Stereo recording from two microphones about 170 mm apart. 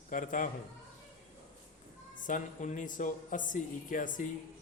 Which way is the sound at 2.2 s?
50° left (ahead or behind).